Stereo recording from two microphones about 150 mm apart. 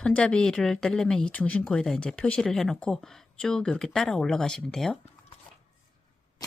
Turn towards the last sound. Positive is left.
turn(degrees=5)  # may be behind; listen again after turning